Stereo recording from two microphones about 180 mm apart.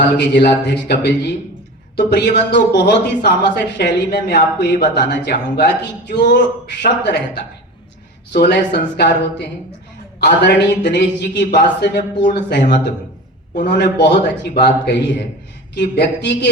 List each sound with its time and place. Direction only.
0.2 s a woman's voice: 70° left (ahead or behind)